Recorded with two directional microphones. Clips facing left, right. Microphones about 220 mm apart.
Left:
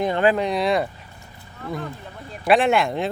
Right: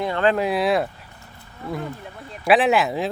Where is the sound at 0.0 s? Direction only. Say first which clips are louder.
Left 2 dB; 20° left (ahead or behind).